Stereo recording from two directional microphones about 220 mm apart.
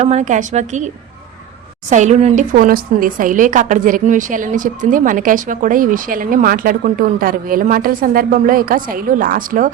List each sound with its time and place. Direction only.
0.0 s a woman's voice: 30° right (ahead or behind)
1.9 s a woman's voice: 30° right (ahead or behind)